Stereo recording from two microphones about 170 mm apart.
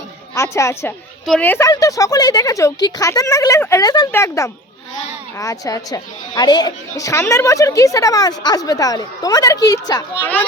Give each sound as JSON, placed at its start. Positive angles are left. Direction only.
{"t": 0.3, "sound": "speech", "side_deg": 15}